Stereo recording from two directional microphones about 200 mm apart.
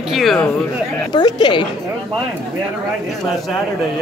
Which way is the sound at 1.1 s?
20° left (ahead or behind).